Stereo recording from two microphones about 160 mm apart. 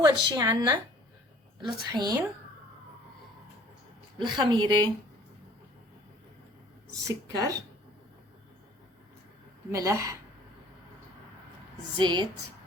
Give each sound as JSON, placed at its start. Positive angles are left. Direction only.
{"t": 0.0, "sound": "a woman's voice", "side_deg": -30}
{"t": 4.2, "sound": "a woman's voice", "side_deg": -25}
{"t": 7.3, "sound": "a woman's voice", "side_deg": -20}
{"t": 9.7, "sound": "a woman's voice", "side_deg": -20}
{"t": 11.9, "sound": "a woman's voice", "side_deg": -30}